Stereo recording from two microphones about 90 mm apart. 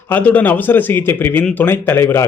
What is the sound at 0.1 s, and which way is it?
A man's voice, 15° left (ahead or behind).